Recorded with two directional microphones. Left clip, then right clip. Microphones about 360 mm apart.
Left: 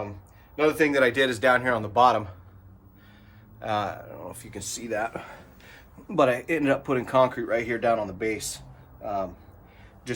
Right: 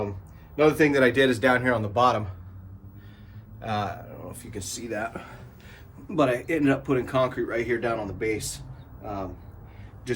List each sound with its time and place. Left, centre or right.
0.5 s speech: centre
3.6 s speech: centre